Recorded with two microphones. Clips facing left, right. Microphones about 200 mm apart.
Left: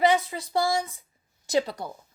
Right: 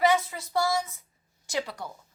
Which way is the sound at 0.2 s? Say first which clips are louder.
Left 2 dB; 30° left (ahead or behind).